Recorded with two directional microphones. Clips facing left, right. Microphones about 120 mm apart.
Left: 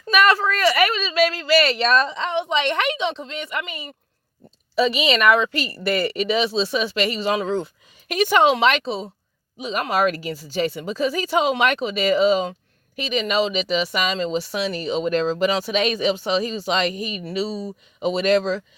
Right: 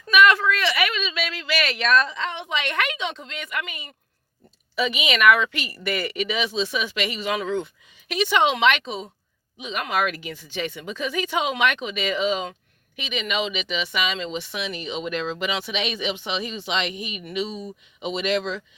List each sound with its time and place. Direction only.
0.1 s speech: 35° left (ahead or behind)
8.0 s speech: 45° left (ahead or behind)